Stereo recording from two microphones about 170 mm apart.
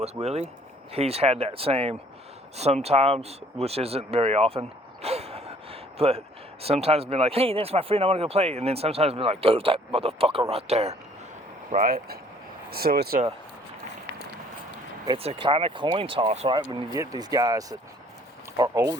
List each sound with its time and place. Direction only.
0.0 s speech: 40° right (ahead or behind)
11.7 s speech: 55° right (ahead or behind)
15.0 s speech: 30° right (ahead or behind)
16.6 s speech: 20° right (ahead or behind)